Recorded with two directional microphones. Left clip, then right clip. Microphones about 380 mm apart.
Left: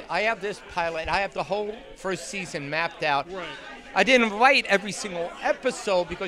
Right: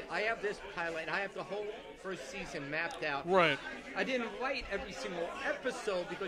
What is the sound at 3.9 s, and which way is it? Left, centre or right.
Speech, left.